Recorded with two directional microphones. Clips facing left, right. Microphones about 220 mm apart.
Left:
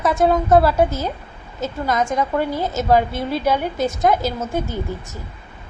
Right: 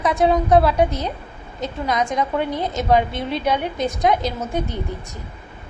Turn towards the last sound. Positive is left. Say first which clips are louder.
# left 2 dB
turn(degrees=5)  # may be behind; listen again after turning